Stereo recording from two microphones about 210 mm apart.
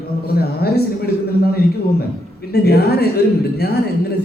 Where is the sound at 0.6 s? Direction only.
50° left (ahead or behind).